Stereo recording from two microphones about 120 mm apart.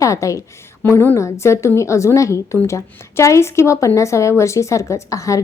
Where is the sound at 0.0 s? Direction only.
25° left (ahead or behind).